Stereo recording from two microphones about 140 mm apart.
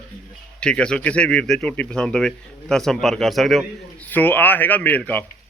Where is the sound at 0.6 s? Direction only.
5° left (ahead or behind).